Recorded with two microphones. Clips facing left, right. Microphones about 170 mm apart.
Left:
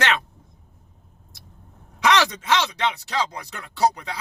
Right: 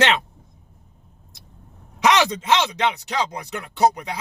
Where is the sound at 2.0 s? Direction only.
20° right (ahead or behind).